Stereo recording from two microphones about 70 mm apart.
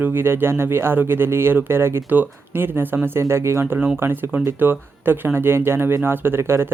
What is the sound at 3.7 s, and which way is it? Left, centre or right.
Speech, right.